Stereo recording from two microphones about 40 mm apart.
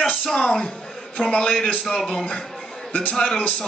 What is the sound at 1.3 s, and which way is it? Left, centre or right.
Music, left.